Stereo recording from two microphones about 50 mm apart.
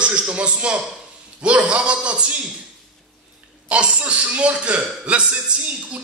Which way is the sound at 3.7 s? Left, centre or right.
Right.